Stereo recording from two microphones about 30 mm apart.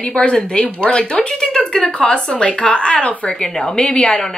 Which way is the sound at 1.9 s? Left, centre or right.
Left.